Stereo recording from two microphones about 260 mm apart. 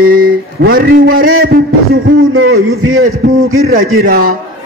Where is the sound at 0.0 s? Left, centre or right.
Right.